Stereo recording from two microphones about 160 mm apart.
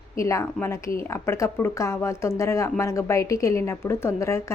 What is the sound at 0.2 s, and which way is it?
A woman's voice, 20° left (ahead or behind).